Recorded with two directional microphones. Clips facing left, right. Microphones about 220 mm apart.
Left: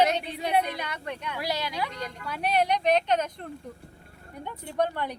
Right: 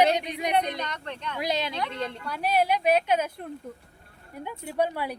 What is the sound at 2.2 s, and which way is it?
Speech, centre (ahead or behind).